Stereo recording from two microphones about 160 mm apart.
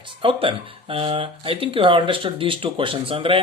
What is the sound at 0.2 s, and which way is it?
Speech, 35° right (ahead or behind).